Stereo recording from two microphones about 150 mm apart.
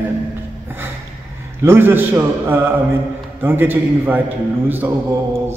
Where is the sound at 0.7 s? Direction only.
15° right (ahead or behind).